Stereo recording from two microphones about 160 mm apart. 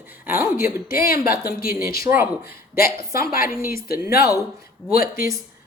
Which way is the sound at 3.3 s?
65° left (ahead or behind).